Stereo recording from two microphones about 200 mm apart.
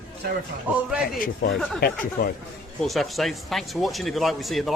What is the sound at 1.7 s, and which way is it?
Speech, 50° left (ahead or behind).